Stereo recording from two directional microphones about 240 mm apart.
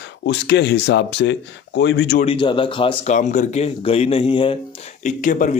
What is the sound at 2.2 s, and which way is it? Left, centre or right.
A man's voice, left.